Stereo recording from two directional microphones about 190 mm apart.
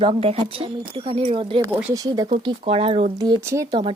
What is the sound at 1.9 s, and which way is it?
Speech, 20° right (ahead or behind).